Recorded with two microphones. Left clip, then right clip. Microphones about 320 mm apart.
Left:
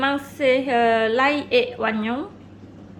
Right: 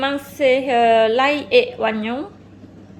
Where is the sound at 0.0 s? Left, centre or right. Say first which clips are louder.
Right 2 dB; centre.